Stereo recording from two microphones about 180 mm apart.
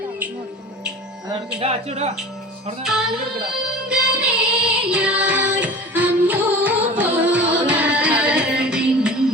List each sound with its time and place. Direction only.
1.5 s speech: 35° right (ahead or behind)
2.8 s music: centre (ahead or behind)